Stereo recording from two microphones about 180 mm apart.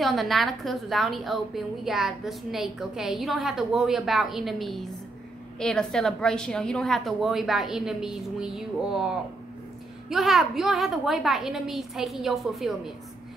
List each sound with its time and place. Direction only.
0.0 s a woman's voice: centre (ahead or behind)